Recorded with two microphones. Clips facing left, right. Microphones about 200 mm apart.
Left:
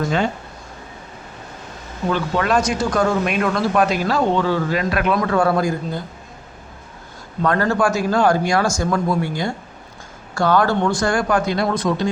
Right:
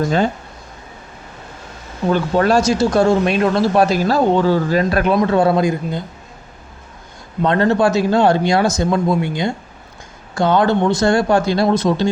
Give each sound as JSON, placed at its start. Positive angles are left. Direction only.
{"t": 2.1, "sound": "speech", "side_deg": -35}
{"t": 7.4, "sound": "speech", "side_deg": -25}